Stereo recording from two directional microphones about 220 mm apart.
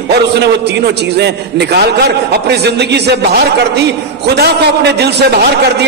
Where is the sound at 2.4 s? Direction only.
50° right (ahead or behind).